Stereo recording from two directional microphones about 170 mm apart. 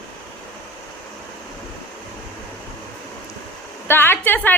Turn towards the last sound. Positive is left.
turn(degrees=10)  # may be behind; listen again after turning